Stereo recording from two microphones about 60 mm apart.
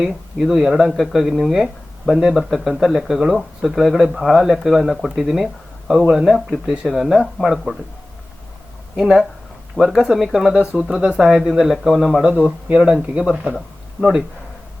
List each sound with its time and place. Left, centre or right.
0.1 s speech: centre
9.0 s speech: centre
10.6 s speech: centre
12.2 s speech: right